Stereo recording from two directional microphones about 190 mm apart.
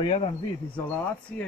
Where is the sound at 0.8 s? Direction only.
10° left (ahead or behind).